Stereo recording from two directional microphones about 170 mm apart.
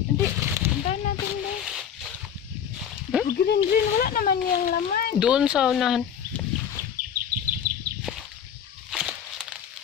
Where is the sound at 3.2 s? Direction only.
65° left (ahead or behind).